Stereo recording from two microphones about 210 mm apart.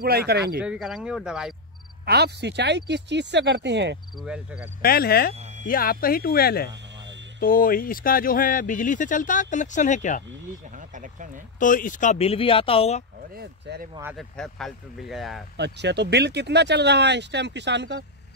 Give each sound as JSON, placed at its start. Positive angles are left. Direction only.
{"t": 0.0, "sound": "speech", "side_deg": -50}
{"t": 0.6, "sound": "speech", "side_deg": -5}
{"t": 2.0, "sound": "speech", "side_deg": -50}
{"t": 4.2, "sound": "speech", "side_deg": -5}
{"t": 4.8, "sound": "speech", "side_deg": 45}
{"t": 5.3, "sound": "a sound", "side_deg": -35}
{"t": 5.7, "sound": "speech", "side_deg": 45}
{"t": 10.8, "sound": "speech", "side_deg": -35}
{"t": 11.6, "sound": "speech", "side_deg": 40}
{"t": 13.3, "sound": "speech", "side_deg": -50}
{"t": 14.1, "sound": "speech", "side_deg": 0}
{"t": 15.5, "sound": "speech", "side_deg": -55}